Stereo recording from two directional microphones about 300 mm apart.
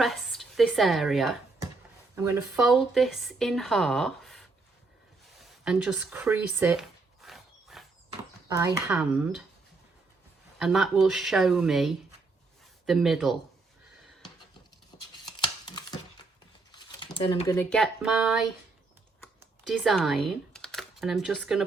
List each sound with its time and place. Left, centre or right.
0.0 s a woman's voice: centre
5.4 s a sound: centre
8.4 s speech: centre
10.6 s a woman's voice: centre
14.9 s a sound: centre
17.2 s speech: centre
19.4 s speech: centre